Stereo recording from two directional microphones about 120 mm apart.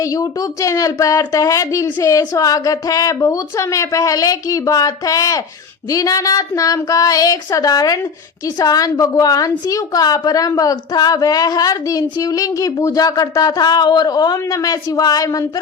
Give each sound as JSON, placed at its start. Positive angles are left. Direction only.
{"t": 0.0, "sound": "a woman's voice", "side_deg": 30}